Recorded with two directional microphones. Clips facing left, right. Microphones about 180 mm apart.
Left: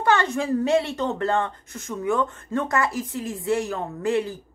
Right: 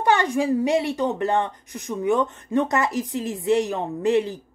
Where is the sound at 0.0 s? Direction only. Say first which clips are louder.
Right 2 dB; 15° right (ahead or behind).